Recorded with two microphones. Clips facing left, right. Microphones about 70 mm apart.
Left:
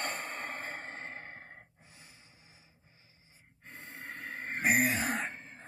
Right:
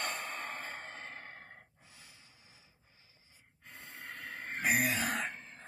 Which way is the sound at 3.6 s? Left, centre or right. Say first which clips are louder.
Left 3 dB; left.